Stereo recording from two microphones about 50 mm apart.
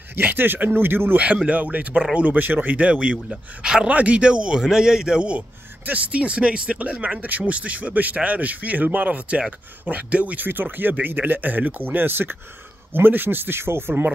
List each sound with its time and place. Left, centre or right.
0.1 s speech: right
1.1 s speech: right
2.9 s speech: right
3.3 s speech: centre
3.8 s speech: right
5.9 s speech: right